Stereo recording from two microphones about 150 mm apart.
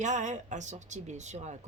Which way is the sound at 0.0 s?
55° right (ahead or behind).